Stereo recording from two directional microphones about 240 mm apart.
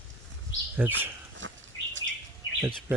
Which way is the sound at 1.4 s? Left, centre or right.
Right.